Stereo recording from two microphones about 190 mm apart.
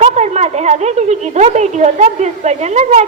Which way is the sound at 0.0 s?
35° right (ahead or behind).